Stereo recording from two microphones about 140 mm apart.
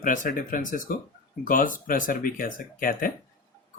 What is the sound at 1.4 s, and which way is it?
Speech, 80° left.